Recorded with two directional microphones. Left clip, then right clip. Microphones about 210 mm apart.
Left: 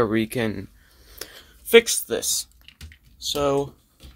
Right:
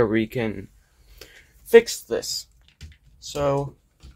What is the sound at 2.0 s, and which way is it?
Speech, 20° left (ahead or behind).